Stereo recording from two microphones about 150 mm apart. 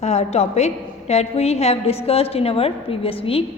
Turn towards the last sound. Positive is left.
turn(degrees=40)  # may be behind; listen again after turning